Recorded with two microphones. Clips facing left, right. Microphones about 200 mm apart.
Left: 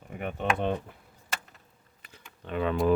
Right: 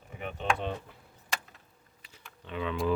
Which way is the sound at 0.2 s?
55° left (ahead or behind).